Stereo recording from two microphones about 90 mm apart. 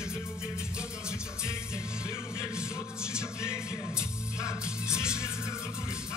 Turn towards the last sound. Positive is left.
turn(degrees=-10)  # may be behind; listen again after turning